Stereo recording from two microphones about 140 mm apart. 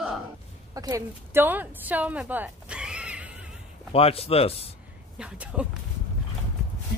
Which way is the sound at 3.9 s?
45° left (ahead or behind).